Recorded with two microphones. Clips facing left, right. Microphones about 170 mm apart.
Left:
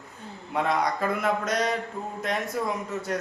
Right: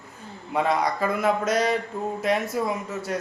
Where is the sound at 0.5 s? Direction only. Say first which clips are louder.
Right 2 dB; centre (ahead or behind).